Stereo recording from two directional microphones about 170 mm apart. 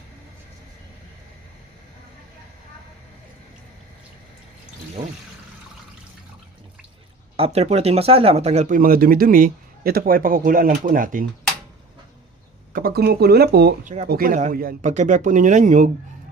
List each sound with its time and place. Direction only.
7.3 s speech: 35° right (ahead or behind); by 11.3 s 55° right (ahead or behind)
12.7 s speech: 65° right (ahead or behind)
13.8 s speech: 40° right (ahead or behind)
14.1 s speech: 60° right (ahead or behind)